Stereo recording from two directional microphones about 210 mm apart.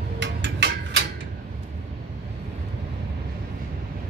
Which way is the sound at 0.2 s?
55° right (ahead or behind).